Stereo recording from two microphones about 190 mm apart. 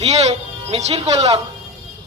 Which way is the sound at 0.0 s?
35° right (ahead or behind).